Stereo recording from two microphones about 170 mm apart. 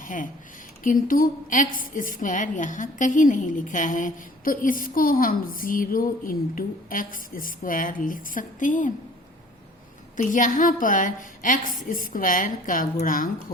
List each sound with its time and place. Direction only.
0.0 s a woman's voice: 50° left (ahead or behind)
10.2 s a woman's voice: 50° left (ahead or behind)